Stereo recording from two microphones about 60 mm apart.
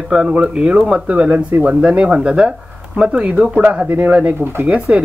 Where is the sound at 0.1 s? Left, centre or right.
Centre.